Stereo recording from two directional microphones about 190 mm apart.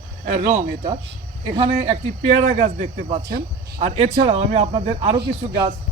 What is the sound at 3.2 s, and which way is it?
Speech, 55° right (ahead or behind).